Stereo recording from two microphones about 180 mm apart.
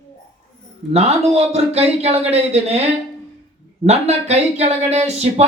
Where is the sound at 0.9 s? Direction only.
35° right (ahead or behind).